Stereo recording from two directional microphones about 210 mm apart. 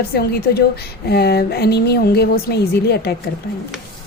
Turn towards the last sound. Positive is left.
turn(degrees=50)  # may be behind; listen again after turning